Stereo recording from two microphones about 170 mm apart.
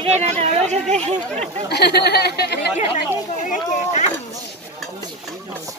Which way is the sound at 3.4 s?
45° left (ahead or behind).